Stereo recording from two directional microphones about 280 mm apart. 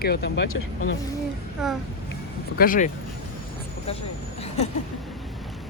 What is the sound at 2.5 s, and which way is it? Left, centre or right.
Speech, left.